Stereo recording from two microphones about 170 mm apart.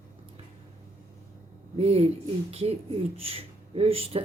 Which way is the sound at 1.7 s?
35° right (ahead or behind).